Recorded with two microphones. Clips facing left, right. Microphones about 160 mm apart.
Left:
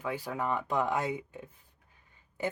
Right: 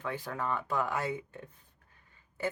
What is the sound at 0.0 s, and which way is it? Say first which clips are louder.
Speech: left 2 dB; 10° left (ahead or behind).